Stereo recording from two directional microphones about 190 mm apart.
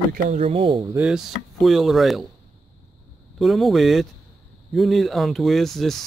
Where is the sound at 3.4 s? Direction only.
Centre (ahead or behind).